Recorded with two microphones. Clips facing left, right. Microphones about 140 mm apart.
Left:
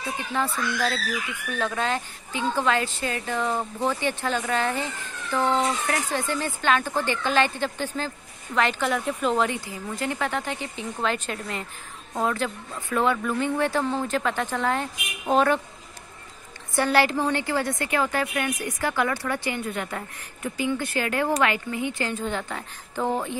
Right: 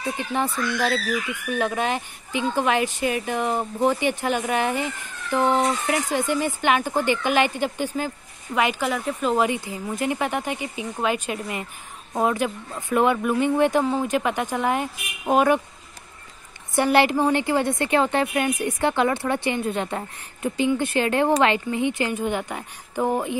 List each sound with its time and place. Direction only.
0.3 s a woman's voice: 20° right (ahead or behind)
16.7 s a woman's voice: 20° right (ahead or behind)